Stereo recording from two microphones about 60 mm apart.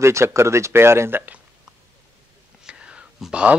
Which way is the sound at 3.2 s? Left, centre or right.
Centre.